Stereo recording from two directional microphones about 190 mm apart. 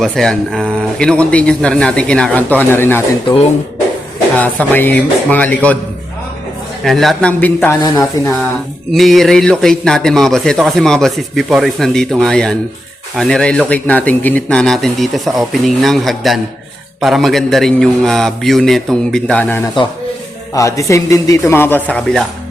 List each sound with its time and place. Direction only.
0.0 s a man's voice: centre (ahead or behind)
4.4 s speech: 10° left (ahead or behind)
6.8 s a man's voice: centre (ahead or behind)
8.9 s a man's voice: centre (ahead or behind)